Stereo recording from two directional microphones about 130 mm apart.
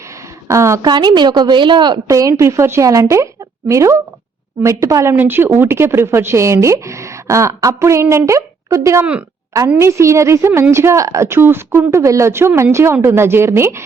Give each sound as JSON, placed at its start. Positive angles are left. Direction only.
{"t": 0.4, "sound": "a woman's voice", "side_deg": -20}
{"t": 0.9, "sound": "a woman's voice", "side_deg": -35}